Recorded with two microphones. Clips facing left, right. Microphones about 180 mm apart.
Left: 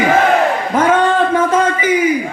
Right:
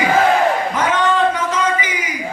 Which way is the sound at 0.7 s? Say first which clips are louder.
Left 5 dB; 50° left (ahead or behind).